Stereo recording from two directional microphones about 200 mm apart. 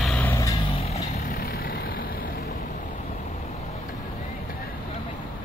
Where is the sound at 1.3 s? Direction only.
45° left (ahead or behind).